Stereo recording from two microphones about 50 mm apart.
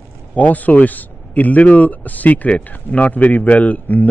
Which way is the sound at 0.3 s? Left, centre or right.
Left.